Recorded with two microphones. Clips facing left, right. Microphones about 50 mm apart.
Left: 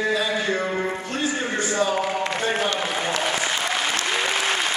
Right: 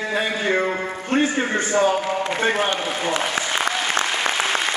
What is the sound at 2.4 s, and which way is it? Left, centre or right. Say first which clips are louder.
Speech: right 4 dB; right.